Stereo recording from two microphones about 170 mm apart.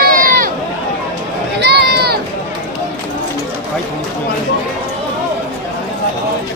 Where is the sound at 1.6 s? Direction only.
75° right (ahead or behind).